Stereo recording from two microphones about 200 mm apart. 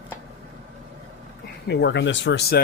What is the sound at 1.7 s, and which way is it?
Speech, 60° left (ahead or behind).